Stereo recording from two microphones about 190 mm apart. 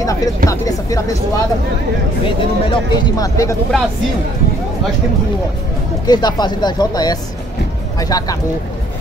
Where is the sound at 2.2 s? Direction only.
25° left (ahead or behind).